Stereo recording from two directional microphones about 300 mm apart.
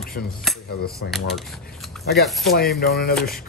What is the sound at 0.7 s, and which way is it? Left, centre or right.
Speech, left.